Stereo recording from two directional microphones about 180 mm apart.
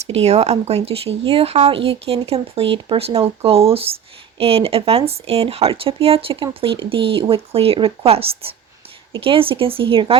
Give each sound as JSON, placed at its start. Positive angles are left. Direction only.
{"t": 0.0, "sound": "speech", "side_deg": -35}